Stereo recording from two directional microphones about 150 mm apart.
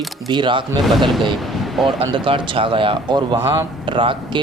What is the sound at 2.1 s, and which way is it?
Speech, 35° right (ahead or behind).